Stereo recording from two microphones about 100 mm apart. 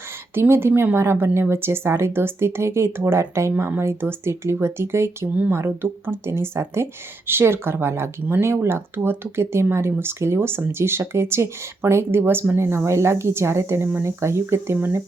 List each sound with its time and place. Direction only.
0.3 s speech: 25° right (ahead or behind)